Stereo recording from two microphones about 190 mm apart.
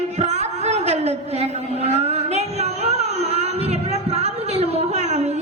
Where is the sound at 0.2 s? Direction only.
35° right (ahead or behind).